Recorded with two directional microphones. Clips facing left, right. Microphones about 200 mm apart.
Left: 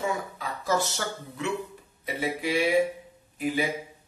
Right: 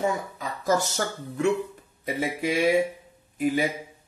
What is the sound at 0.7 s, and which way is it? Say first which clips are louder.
A man's voice: right 3 dB; 45° right (ahead or behind).